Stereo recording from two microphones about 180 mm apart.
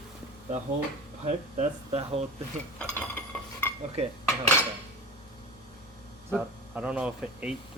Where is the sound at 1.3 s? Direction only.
35° right (ahead or behind).